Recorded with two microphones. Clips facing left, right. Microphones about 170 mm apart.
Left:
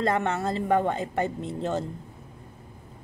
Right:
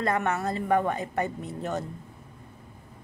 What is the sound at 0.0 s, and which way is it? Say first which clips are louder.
A woman's voice: left 1 dB; 25° left (ahead or behind).